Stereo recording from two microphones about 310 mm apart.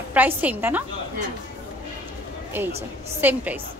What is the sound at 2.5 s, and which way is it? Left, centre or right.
A woman's voice, centre.